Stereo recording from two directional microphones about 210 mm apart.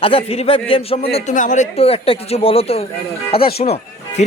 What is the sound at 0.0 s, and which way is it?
Speech, 25° left (ahead or behind).